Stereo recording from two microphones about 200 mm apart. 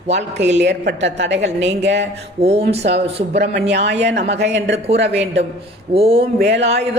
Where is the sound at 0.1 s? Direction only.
60° right (ahead or behind).